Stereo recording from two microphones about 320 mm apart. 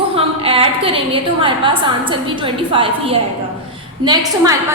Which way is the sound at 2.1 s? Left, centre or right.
Centre.